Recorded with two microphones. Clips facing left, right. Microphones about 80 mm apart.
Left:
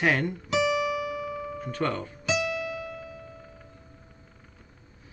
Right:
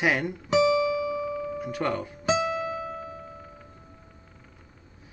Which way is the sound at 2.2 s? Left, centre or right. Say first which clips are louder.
Right 3 dB; right.